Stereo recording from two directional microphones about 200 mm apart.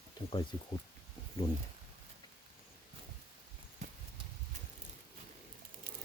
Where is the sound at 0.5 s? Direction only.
20° left (ahead or behind).